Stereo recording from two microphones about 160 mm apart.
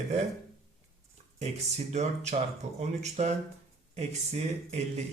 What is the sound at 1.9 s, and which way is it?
Speech, 45° right (ahead or behind).